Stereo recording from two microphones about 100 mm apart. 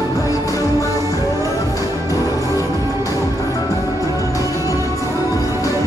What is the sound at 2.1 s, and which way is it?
Music, 35° left (ahead or behind).